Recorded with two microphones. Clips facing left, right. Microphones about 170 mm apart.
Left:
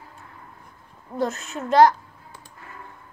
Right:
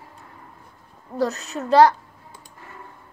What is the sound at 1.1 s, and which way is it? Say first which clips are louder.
Speech: right 2 dB; 35° right (ahead or behind).